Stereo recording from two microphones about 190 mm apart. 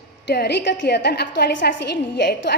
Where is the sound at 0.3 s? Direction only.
60° left (ahead or behind).